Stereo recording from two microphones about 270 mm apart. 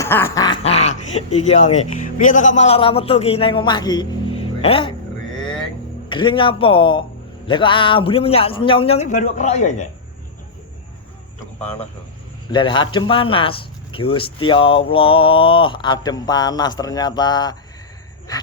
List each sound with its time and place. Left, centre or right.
0.0 s speech: centre
6.1 s a man's voice: centre
12.5 s speech: centre
18.3 s a sound: centre